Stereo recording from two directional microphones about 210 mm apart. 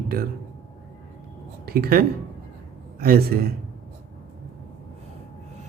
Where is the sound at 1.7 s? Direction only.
45° right (ahead or behind).